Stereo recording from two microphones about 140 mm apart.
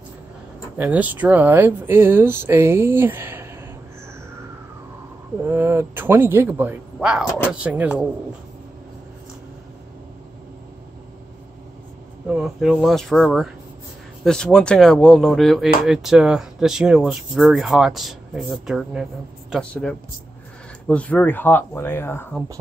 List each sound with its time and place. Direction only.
0.7 s speech: 10° right (ahead or behind)
5.4 s speech: 15° right (ahead or behind)
12.3 s speech: 5° right (ahead or behind)
19.7 s speech: 10° left (ahead or behind)